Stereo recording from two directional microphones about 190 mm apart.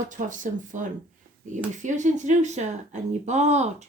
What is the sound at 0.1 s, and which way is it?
Speech, 40° right (ahead or behind).